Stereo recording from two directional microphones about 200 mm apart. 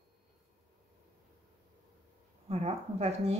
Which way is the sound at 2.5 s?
30° right (ahead or behind).